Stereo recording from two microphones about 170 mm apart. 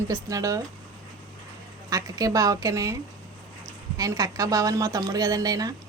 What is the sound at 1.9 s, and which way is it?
A woman's voice, 20° right (ahead or behind).